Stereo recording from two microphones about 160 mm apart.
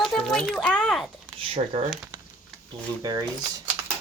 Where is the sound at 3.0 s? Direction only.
25° right (ahead or behind).